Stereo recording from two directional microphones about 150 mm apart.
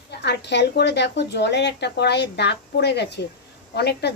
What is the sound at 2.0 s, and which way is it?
A child's voice, 90° left.